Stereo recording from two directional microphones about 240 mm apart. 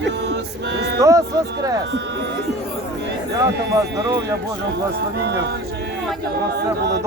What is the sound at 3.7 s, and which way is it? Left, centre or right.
Speech, centre.